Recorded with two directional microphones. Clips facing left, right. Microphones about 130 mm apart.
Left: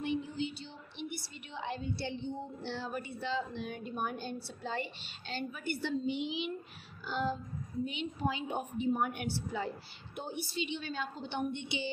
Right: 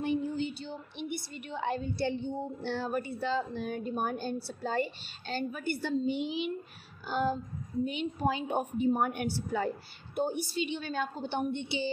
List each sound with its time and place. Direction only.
0.0 s a woman's voice: 45° right (ahead or behind)